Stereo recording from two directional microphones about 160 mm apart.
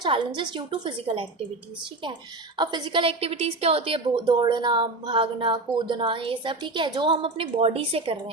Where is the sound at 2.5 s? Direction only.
30° right (ahead or behind).